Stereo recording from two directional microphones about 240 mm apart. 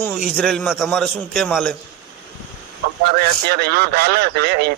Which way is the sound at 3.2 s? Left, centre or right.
Right.